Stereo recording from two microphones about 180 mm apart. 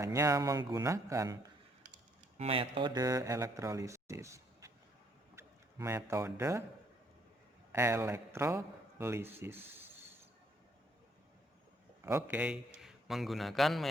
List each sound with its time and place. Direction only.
0.0 s speech: 15° right (ahead or behind)
2.4 s speech: 30° right (ahead or behind); by 6.7 s 15° right (ahead or behind)
7.7 s a man's voice: 15° right (ahead or behind)
12.0 s a man's voice: 10° right (ahead or behind)